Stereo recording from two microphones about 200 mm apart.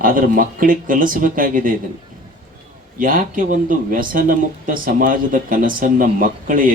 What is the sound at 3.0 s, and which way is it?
Speech, 45° right (ahead or behind).